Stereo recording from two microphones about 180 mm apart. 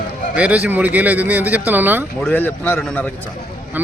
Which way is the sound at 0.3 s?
5° right (ahead or behind).